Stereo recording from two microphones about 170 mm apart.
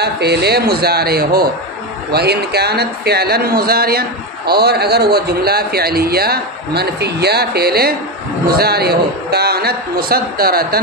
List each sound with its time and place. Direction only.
0.0 s a man's voice: 70° right (ahead or behind)